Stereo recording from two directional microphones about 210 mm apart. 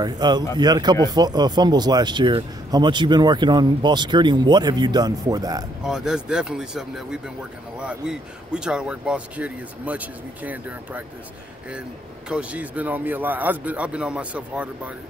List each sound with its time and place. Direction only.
0.0 s speech: 20° right (ahead or behind)
5.9 s speech: 5° right (ahead or behind)
12.3 s speech: 5° right (ahead or behind)